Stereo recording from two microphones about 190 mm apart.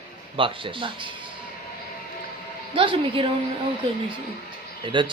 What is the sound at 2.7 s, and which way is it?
Speech, 25° right (ahead or behind).